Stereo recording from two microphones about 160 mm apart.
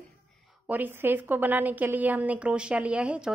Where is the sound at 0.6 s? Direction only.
10° right (ahead or behind).